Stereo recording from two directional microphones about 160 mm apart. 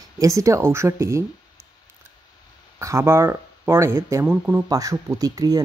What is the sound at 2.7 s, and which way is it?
Speech, 15° right (ahead or behind).